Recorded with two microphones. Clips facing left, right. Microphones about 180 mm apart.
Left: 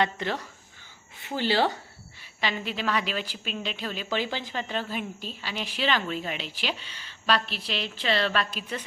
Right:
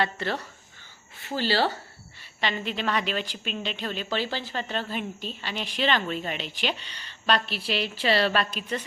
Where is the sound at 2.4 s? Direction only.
5° left (ahead or behind).